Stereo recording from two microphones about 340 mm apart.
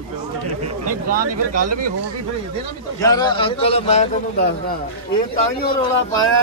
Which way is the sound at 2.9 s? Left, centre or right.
Centre.